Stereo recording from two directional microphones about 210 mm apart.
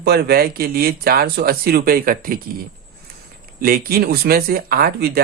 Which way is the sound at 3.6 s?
45° right (ahead or behind).